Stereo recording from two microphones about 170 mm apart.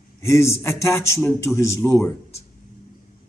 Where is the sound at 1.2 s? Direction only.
5° left (ahead or behind).